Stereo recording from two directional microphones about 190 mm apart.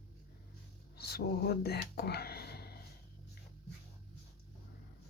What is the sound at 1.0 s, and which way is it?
Speech, 55° left (ahead or behind).